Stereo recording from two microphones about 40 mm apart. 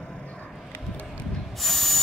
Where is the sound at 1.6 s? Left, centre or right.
Centre.